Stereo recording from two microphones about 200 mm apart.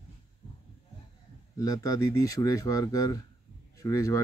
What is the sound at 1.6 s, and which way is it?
Speech, 15° left (ahead or behind).